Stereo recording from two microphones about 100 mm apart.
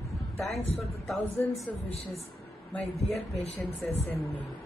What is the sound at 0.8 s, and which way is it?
Speech, centre (ahead or behind).